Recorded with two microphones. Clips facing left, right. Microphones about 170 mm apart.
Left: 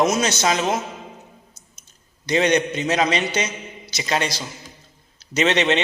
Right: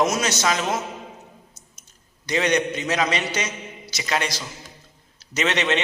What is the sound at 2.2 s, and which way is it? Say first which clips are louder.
Speech: left 3 dB; 25° left (ahead or behind).